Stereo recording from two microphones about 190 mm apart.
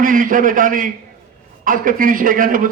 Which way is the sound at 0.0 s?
45° right (ahead or behind).